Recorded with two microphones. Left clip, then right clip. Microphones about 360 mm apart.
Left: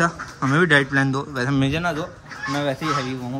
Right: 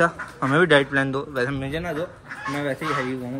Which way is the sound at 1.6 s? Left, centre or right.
Centre.